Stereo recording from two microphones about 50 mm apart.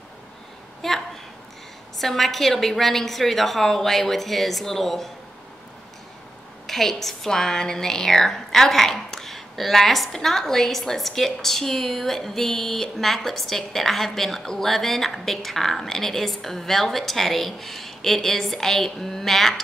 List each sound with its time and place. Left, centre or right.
0.8 s a sound: centre
2.0 s a woman's voice: centre
6.7 s a woman's voice: centre